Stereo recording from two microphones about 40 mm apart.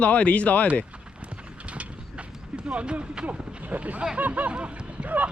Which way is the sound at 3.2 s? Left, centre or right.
Right.